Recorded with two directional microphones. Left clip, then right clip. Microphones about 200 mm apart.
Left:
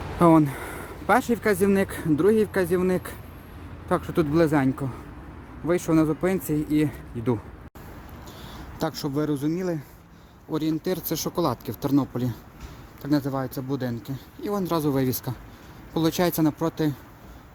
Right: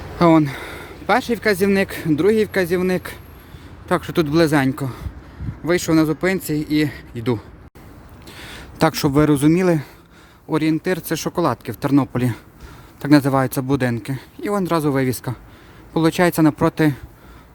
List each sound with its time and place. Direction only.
0.2 s speech: 20° right (ahead or behind)
9.0 s a man's voice: 35° right (ahead or behind)
9.6 s speech: 70° right (ahead or behind)
10.5 s a man's voice: 20° right (ahead or behind)